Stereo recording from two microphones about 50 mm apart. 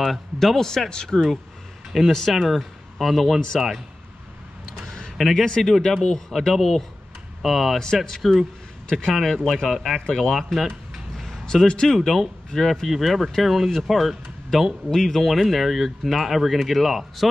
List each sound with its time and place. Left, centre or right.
0.0 s speech: centre
4.8 s a sound: centre
5.1 s speech: centre
7.8 s speech: centre
11.1 s music: centre
11.4 s speech: centre
11.9 s speech: centre